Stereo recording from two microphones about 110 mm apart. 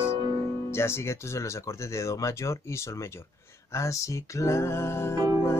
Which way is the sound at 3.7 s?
25° left (ahead or behind).